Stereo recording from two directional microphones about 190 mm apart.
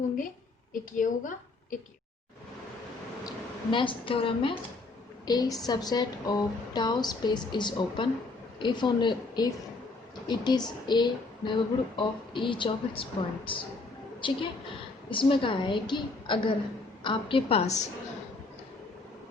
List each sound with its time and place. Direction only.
0.7 s a woman's voice: 45° left (ahead or behind)
3.2 s a woman's voice: 25° left (ahead or behind)